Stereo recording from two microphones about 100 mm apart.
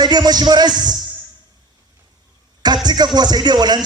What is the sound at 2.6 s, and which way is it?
Music, 45° right (ahead or behind).